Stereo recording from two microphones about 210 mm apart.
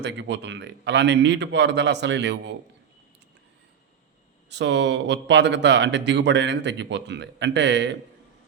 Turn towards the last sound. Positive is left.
turn(degrees=-55)  # may be behind; listen again after turning